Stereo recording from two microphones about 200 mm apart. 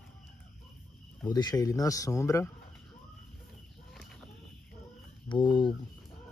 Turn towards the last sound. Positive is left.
turn(degrees=25)  # may be behind; listen again after turning